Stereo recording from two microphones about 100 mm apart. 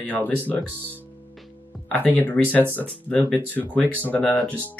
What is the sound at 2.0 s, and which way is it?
Speech, 15° left (ahead or behind).